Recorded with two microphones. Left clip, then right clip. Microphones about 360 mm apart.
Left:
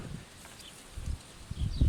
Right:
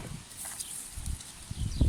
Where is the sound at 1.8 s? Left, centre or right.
Right.